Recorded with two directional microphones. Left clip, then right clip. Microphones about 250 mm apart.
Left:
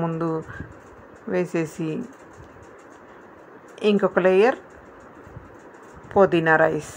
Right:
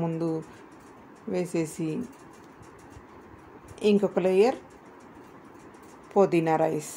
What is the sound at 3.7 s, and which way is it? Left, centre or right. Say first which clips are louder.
Speech: left 4 dB; centre.